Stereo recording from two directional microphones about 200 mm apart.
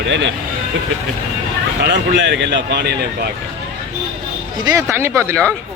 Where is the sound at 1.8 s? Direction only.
60° right (ahead or behind).